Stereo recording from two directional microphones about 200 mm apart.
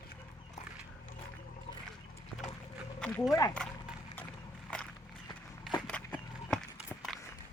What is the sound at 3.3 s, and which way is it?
Speech, 20° left (ahead or behind).